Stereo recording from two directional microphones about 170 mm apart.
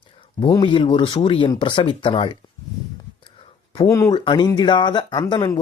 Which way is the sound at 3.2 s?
30° left (ahead or behind).